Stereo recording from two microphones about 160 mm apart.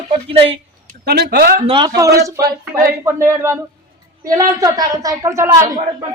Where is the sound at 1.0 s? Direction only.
85° right; by 1.6 s 70° right (ahead or behind).